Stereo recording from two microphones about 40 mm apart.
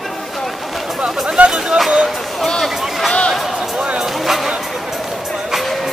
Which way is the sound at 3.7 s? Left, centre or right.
Right.